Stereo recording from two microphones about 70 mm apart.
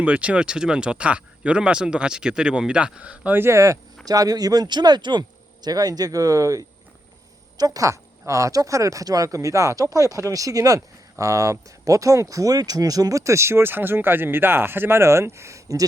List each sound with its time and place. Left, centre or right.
0.0 s speech: centre
3.3 s speech: right
4.0 s speech: right
5.6 s speech: right